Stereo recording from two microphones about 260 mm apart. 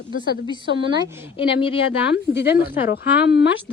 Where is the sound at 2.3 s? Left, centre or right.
Left.